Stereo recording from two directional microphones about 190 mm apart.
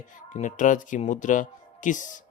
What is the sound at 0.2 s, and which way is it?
Speech, 40° left (ahead or behind).